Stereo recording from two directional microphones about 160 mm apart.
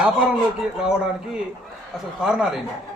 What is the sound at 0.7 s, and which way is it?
Speech, 5° right (ahead or behind).